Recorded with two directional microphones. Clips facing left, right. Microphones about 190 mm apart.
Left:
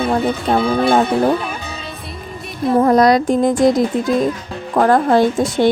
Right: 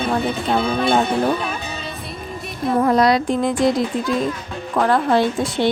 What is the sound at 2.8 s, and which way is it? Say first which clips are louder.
A woman's voice: left 4 dB; 45° left (ahead or behind).